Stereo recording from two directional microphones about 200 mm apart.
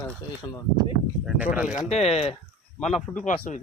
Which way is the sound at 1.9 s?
30° left (ahead or behind).